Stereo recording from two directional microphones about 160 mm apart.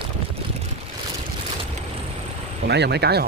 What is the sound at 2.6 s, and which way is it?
Speech, 90° right.